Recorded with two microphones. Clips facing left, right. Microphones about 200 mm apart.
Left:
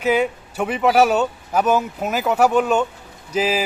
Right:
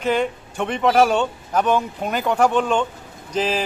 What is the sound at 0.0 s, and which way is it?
A man's voice, 5° left (ahead or behind).